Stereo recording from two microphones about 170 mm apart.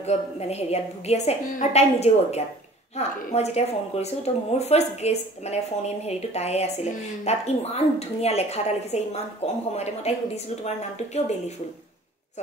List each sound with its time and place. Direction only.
0.0 s speech: 40° left (ahead or behind)